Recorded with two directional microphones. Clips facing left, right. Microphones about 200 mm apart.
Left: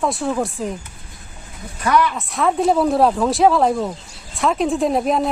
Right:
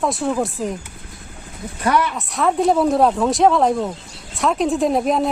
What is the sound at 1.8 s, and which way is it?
Speech, 25° right (ahead or behind).